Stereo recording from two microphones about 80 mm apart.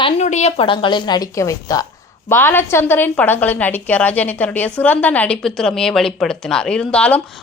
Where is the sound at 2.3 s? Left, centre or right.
Left.